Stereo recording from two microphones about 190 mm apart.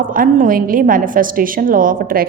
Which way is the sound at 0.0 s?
45° right (ahead or behind).